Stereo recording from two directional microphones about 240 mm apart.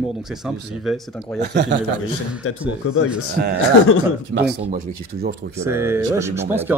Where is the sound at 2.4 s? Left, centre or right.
Left.